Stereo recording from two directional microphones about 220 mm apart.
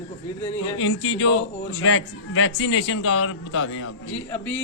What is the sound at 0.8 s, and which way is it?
A man's voice, 70° left (ahead or behind).